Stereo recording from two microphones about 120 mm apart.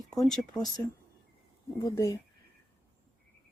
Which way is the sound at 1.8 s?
25° left (ahead or behind).